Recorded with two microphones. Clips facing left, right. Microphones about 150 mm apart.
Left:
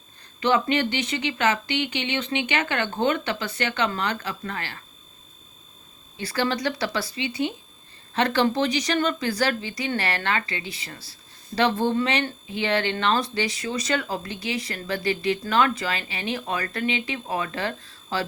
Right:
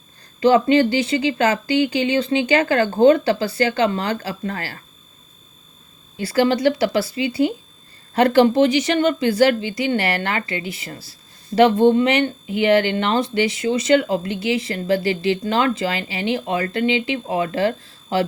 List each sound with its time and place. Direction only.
0.3 s speech: 30° right (ahead or behind)
6.2 s speech: 30° right (ahead or behind)
12.5 s speech: 30° left (ahead or behind)
12.9 s speech: 30° right (ahead or behind)